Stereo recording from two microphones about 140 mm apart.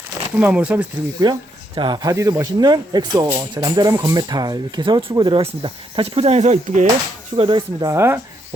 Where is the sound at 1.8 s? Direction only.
30° right (ahead or behind); by 6.9 s 60° right (ahead or behind).